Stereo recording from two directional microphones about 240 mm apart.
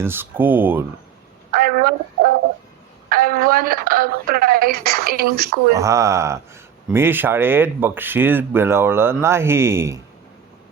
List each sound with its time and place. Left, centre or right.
0.0 s speech: centre
1.5 s fowl: right
3.1 s speech: right
5.7 s speech: centre